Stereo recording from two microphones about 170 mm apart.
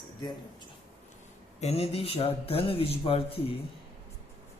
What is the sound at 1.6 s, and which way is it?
Speech, 35° left (ahead or behind).